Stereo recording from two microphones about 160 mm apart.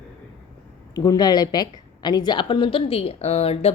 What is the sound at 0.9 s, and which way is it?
A woman's voice, 25° left (ahead or behind).